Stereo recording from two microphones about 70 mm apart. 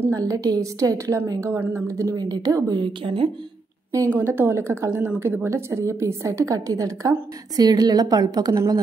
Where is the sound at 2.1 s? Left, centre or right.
Right.